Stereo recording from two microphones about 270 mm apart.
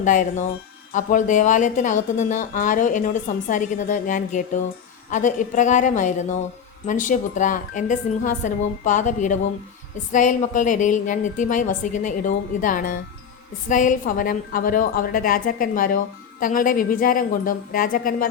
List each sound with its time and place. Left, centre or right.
0.0 s a woman's voice: left